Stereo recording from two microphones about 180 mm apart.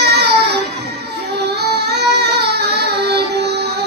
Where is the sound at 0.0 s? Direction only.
65° right (ahead or behind).